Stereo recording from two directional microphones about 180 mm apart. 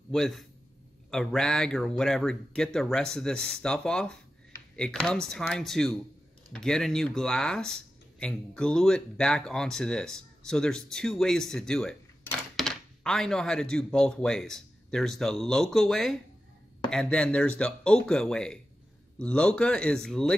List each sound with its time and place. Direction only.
0.1 s speech: centre (ahead or behind)